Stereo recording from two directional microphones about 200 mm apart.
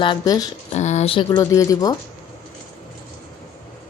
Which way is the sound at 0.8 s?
35° left (ahead or behind).